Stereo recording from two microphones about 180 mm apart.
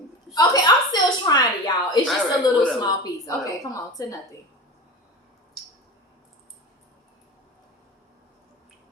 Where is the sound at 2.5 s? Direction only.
20° left (ahead or behind).